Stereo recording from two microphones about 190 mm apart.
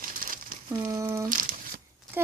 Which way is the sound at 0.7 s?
15° right (ahead or behind).